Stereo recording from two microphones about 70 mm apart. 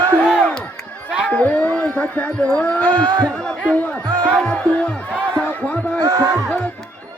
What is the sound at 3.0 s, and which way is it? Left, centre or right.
Speech, right.